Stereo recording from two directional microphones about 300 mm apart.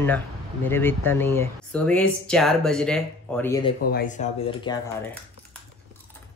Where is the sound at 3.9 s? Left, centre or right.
Left.